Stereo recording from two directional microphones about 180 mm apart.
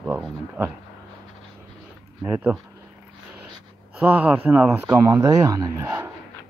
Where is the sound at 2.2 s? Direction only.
10° right (ahead or behind).